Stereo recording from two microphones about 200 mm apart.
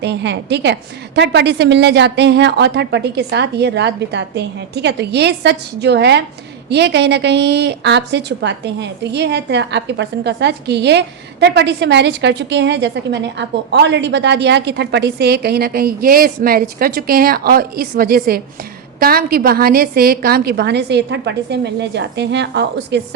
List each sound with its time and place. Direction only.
0.0 s a woman's voice: 60° right (ahead or behind)